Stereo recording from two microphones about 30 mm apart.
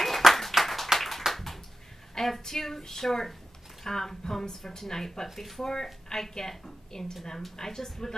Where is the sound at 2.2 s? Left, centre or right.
Centre.